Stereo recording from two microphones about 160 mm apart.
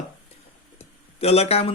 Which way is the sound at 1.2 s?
40° left (ahead or behind).